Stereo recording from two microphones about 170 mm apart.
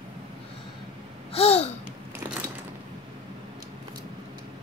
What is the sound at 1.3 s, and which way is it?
Gasp, 35° left (ahead or behind).